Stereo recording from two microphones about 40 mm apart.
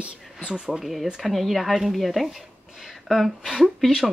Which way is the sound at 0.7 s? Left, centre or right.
Centre.